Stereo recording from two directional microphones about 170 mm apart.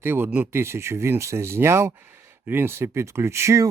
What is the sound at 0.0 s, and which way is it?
Speech, 10° right (ahead or behind).